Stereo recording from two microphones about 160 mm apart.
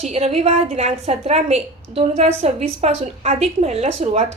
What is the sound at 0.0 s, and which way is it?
A woman's voice, 45° right (ahead or behind).